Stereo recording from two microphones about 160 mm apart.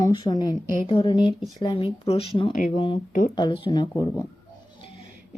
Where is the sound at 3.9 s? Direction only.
15° left (ahead or behind).